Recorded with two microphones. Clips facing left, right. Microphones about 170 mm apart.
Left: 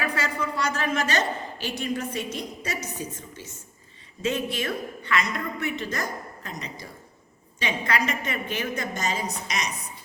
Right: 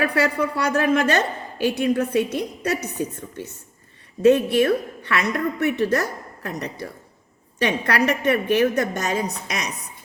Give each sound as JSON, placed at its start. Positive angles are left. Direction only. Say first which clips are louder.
{"t": 0.0, "sound": "a woman's voice", "louder": "right 7 dB", "side_deg": -65}